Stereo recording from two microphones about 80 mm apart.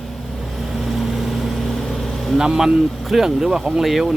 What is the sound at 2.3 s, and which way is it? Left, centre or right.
Speech, centre.